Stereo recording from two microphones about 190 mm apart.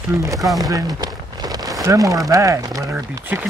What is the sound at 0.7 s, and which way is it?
Rain on surface, 20° right (ahead or behind).